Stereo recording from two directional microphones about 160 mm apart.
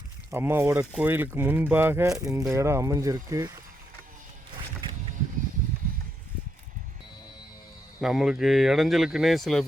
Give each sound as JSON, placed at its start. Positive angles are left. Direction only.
{"t": 0.3, "sound": "speech", "side_deg": -15}
{"t": 8.0, "sound": "speech", "side_deg": -5}